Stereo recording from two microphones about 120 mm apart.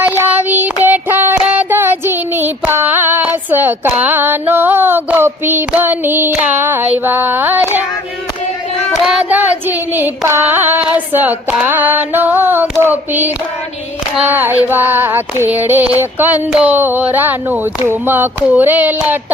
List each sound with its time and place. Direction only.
0.2 s child singing: 15° right (ahead or behind)
9.0 s carnatic music: 10° right (ahead or behind)
10.9 s a sound: 15° right (ahead or behind)